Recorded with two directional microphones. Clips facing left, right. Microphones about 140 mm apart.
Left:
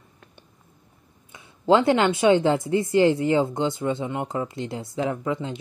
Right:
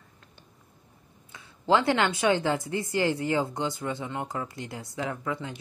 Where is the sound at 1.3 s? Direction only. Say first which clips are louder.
Left 5 dB; 20° left (ahead or behind).